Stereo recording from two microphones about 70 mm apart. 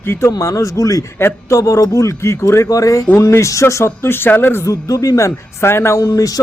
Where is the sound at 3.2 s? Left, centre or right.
Left.